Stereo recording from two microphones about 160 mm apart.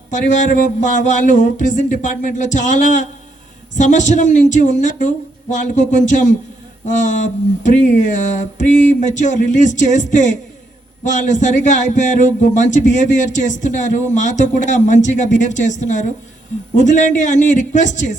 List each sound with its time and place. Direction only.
0.1 s a man's voice: 50° left (ahead or behind)